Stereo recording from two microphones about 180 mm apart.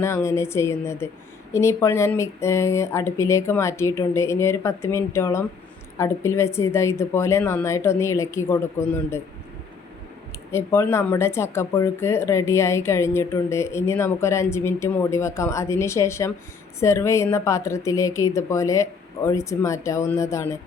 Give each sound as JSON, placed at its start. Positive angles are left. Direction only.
{"t": 0.0, "sound": "speech", "side_deg": 15}
{"t": 10.5, "sound": "speech", "side_deg": 15}